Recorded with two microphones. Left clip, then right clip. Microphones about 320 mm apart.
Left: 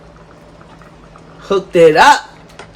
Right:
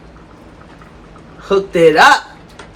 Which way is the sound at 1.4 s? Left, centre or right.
Left.